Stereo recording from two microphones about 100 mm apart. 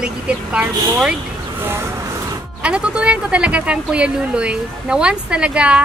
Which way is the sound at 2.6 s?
10° right (ahead or behind).